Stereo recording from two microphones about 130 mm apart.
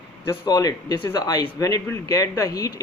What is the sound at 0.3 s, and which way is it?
Speech, 25° left (ahead or behind).